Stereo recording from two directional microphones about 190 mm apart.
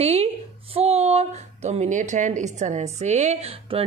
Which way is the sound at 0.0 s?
30° right (ahead or behind).